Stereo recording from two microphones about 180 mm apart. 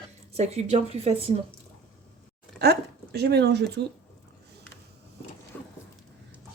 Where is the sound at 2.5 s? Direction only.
65° right (ahead or behind).